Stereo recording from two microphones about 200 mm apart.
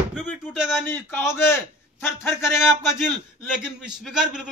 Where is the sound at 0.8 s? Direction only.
10° left (ahead or behind).